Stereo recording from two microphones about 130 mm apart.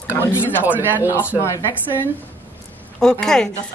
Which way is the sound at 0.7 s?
15° right (ahead or behind).